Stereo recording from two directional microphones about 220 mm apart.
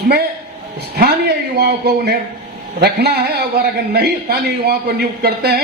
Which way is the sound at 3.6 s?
45° right (ahead or behind).